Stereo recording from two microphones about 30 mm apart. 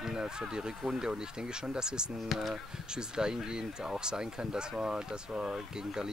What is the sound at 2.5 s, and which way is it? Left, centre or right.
Speech, right.